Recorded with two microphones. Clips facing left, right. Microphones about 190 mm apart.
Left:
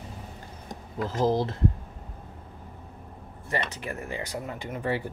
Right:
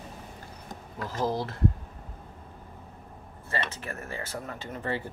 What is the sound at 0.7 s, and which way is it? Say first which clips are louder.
Speech: left 5 dB; 20° left (ahead or behind).